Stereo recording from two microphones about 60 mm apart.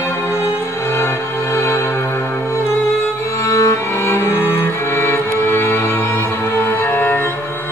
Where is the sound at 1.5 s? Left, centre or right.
Left.